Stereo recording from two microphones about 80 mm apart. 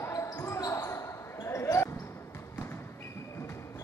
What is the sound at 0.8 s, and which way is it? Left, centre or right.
Basketball bounce, left.